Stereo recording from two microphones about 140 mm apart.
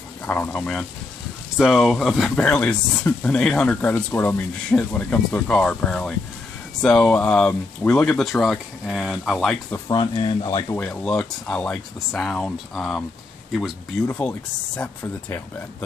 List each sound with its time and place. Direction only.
0.3 s speech: 10° left (ahead or behind)
9.8 s speech: 35° left (ahead or behind)
10.8 s speech: 10° left (ahead or behind)